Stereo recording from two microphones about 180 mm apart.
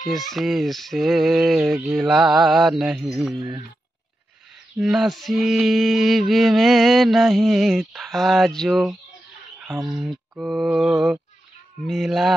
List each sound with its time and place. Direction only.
0.0 s mantra: centre (ahead or behind)
3.3 s speech: 20° right (ahead or behind)
4.7 s mantra: centre (ahead or behind)